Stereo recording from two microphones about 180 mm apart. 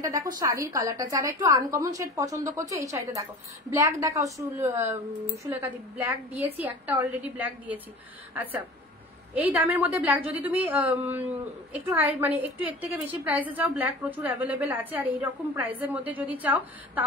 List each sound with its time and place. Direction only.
0.0 s a woman's voice: 20° right (ahead or behind)
9.3 s a woman's voice: 10° right (ahead or behind)